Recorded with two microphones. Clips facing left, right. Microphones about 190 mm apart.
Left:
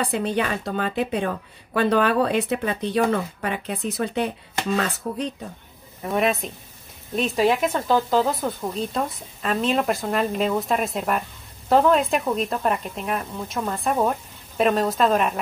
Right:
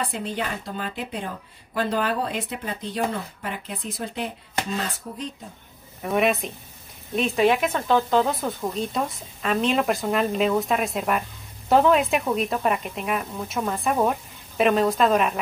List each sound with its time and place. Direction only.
0.2 s speech: 65° left (ahead or behind)
6.0 s speech: centre (ahead or behind)